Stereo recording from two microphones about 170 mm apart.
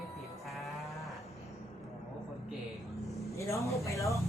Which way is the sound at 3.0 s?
Centre (ahead or behind).